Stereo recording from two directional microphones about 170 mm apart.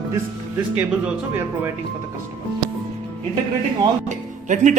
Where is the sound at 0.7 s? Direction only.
10° right (ahead or behind).